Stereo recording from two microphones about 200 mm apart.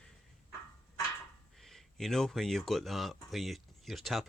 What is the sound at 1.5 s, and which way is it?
Speech, centre (ahead or behind).